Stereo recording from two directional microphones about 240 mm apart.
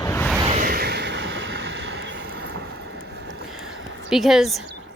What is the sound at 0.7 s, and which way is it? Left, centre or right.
Vehicle, right.